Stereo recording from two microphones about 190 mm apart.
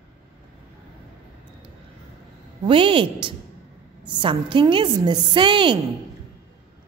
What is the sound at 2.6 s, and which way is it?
A woman's voice, 25° right (ahead or behind).